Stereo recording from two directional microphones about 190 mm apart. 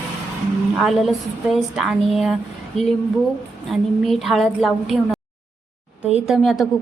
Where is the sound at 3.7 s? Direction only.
Centre (ahead or behind).